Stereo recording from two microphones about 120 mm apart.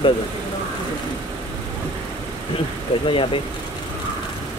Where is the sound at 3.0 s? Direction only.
45° left (ahead or behind).